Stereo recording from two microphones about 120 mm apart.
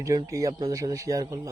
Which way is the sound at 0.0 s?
30° right (ahead or behind).